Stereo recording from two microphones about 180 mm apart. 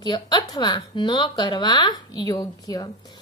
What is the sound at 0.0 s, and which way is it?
Speech, 25° left (ahead or behind).